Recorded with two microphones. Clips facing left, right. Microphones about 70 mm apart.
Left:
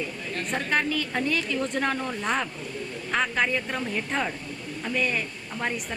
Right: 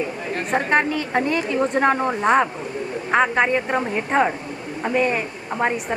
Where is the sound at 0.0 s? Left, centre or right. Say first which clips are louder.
Right 6 dB; right.